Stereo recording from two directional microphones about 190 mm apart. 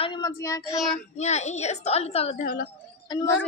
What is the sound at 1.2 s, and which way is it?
A woman's voice, 35° left (ahead or behind).